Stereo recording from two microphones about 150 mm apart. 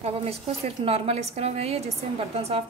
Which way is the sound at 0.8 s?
40° right (ahead or behind).